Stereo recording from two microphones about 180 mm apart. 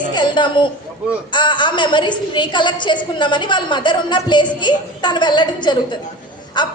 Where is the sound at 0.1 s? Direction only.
25° left (ahead or behind).